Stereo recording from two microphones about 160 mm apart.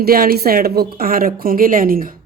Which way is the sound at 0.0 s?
65° right (ahead or behind).